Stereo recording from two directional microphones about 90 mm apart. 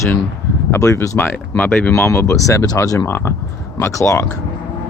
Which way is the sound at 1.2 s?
20° left (ahead or behind).